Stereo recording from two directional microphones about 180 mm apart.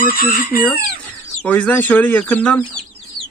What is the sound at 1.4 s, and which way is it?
Speech, 10° left (ahead or behind).